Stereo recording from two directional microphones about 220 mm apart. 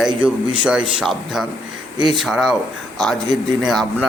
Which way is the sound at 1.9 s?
20° right (ahead or behind).